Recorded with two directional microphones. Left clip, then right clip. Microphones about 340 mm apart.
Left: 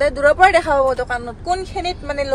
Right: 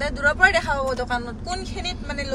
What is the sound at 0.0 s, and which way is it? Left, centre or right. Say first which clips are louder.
A woman's voice: left 6 dB; centre.